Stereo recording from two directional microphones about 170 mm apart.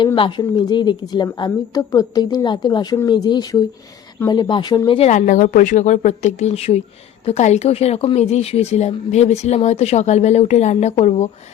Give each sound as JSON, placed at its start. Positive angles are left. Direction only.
{"t": 0.0, "sound": "a woman's voice", "side_deg": 30}